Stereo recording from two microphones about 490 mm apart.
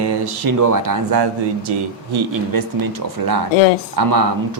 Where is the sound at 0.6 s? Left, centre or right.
Right.